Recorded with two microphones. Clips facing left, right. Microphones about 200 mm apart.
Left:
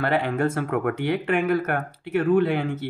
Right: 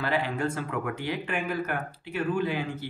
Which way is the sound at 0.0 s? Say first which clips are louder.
Left 5 dB; 55° left (ahead or behind).